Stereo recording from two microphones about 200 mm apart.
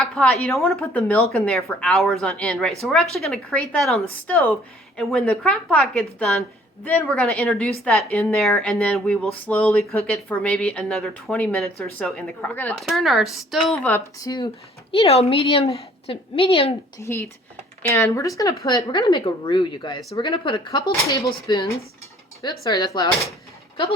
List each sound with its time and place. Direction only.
0.0 s a woman's voice: 5° left (ahead or behind); by 16.7 s 30° left (ahead or behind)
17.0 s a woman's voice: 15° left (ahead or behind)